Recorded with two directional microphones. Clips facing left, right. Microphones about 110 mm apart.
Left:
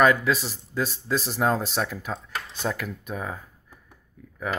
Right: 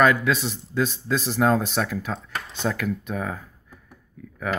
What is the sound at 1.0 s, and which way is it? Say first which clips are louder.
Speech: right 2 dB; 5° left (ahead or behind).